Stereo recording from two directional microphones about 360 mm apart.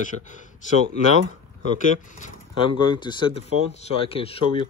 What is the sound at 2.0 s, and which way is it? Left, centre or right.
Speech, left.